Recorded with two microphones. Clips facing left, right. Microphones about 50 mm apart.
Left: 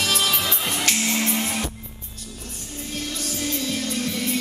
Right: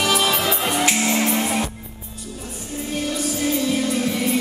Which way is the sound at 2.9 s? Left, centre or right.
Centre.